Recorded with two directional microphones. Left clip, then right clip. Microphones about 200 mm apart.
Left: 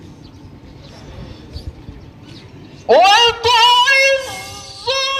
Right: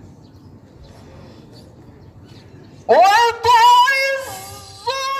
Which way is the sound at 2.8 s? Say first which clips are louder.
Left 2 dB; 35° right (ahead or behind).